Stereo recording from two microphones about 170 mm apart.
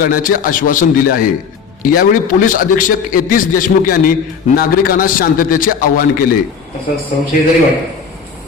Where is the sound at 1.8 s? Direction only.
55° left (ahead or behind).